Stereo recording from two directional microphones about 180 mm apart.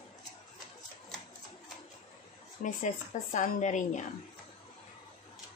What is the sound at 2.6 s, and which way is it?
A woman's voice, 45° left (ahead or behind).